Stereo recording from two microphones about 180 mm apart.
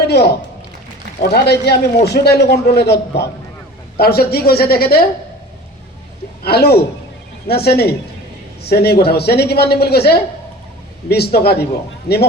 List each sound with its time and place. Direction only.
0.1 s a man's voice: 65° left (ahead or behind)
6.4 s speech: 60° left (ahead or behind)